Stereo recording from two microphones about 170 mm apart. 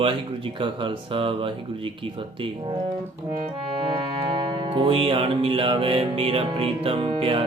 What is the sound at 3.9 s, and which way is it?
Music, 30° right (ahead or behind).